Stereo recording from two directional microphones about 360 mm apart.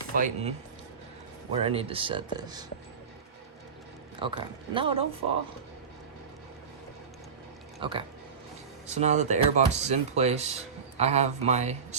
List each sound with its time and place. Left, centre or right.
0.1 s speech: right
1.5 s speech: centre
4.2 s speech: centre
7.8 s speech: centre